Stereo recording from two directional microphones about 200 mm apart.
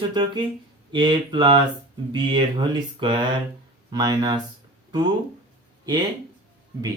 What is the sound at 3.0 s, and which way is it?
Speech, 25° right (ahead or behind).